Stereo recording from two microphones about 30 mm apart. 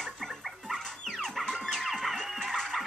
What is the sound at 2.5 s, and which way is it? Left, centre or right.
Music, centre.